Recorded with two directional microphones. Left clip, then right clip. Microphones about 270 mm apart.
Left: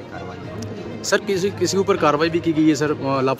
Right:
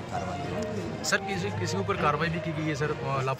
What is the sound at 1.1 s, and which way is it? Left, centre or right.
Speech, left.